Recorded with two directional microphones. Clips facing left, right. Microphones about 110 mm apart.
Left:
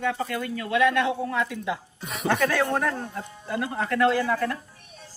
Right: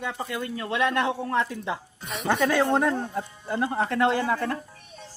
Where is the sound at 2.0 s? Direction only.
Centre (ahead or behind).